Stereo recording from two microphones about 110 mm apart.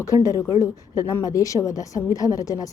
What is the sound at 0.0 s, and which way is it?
A woman's voice, 30° left (ahead or behind).